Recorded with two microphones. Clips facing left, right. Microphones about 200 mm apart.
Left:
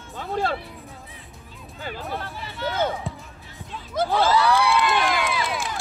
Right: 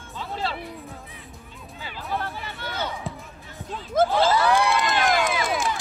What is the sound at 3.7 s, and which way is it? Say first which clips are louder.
Crowd: right 3 dB; 50° right (ahead or behind).